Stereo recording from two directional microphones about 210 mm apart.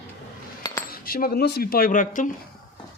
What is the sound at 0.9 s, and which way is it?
Speech, 45° left (ahead or behind).